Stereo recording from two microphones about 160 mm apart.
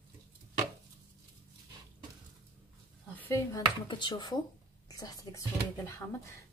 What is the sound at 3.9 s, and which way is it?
A woman's voice, 30° left (ahead or behind).